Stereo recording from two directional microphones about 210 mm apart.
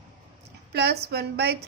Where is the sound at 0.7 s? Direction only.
50° right (ahead or behind).